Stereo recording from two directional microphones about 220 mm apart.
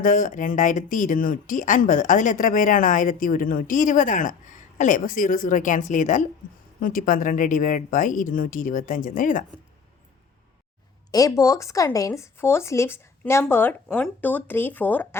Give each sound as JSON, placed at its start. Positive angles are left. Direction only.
{"t": 0.0, "sound": "speech", "side_deg": 35}
{"t": 11.1, "sound": "speech", "side_deg": 15}